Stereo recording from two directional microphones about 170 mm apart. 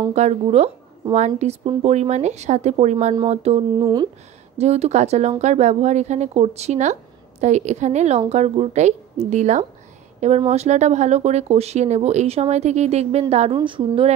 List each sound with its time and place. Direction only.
0.1 s speech: 40° right (ahead or behind)
3.7 s a woman's voice: 25° right (ahead or behind)
4.6 s a woman's voice: 40° right (ahead or behind)